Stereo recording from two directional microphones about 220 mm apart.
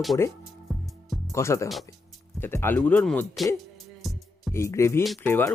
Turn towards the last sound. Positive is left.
turn(degrees=10)  # may be behind; listen again after turning